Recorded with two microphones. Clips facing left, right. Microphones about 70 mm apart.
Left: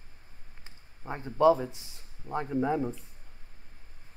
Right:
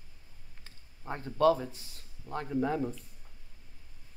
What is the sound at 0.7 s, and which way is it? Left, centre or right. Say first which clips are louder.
Speech: left 1 dB; centre.